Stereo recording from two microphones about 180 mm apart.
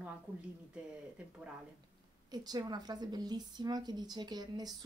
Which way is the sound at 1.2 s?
5° right (ahead or behind).